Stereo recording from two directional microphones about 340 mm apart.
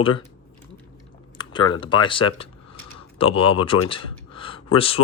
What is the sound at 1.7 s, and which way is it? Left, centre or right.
Speech, centre.